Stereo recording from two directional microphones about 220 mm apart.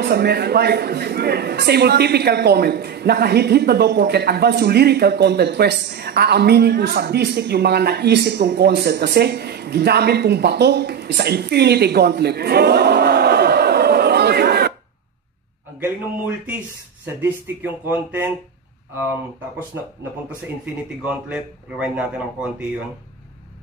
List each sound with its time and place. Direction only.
0.0 s a man's voice: 50° right (ahead or behind)
17.2 s speech: 10° right (ahead or behind)
21.0 s a man's voice: 5° right (ahead or behind)